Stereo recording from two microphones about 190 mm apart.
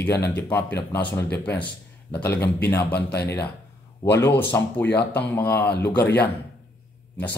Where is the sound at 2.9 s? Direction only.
60° left (ahead or behind).